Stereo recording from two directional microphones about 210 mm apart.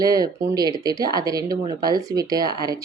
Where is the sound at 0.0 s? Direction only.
20° right (ahead or behind).